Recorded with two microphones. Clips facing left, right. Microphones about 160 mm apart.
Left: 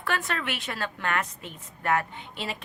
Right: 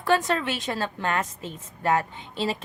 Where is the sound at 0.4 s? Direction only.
35° right (ahead or behind).